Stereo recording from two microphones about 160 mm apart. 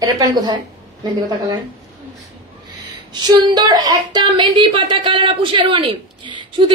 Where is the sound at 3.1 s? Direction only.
25° right (ahead or behind).